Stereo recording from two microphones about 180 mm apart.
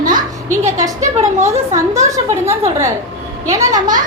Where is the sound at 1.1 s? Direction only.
35° right (ahead or behind).